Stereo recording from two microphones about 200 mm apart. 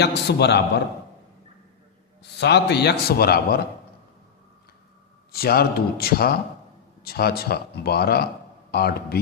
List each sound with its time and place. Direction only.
0.0 s a man's voice: 55° left (ahead or behind)
2.4 s speech: 55° left (ahead or behind)
5.3 s speech: 50° left (ahead or behind)